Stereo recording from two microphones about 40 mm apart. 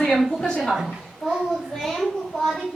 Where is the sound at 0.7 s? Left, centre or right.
Centre.